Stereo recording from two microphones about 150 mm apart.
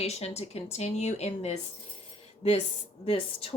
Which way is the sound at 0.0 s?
45° left (ahead or behind).